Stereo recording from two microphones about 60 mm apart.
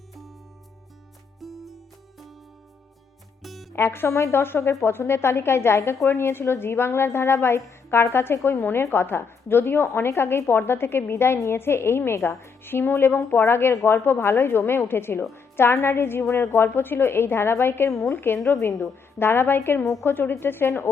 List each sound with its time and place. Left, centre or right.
1.4 s music: centre
3.4 s music: centre
3.7 s a woman's voice: left
18.5 s a woman's voice: left